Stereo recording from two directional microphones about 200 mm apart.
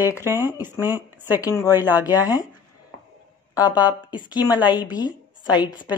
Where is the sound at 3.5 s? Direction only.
20° left (ahead or behind).